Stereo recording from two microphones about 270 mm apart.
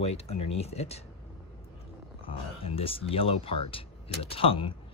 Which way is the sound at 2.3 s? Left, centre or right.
Left.